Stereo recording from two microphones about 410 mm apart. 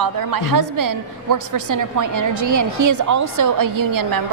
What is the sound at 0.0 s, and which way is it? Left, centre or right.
A woman's voice, right.